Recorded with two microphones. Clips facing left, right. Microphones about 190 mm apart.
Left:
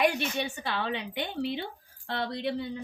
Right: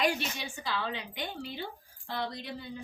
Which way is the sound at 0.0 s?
60° left (ahead or behind).